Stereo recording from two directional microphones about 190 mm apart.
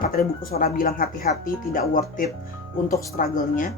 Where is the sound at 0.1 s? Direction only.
50° left (ahead or behind).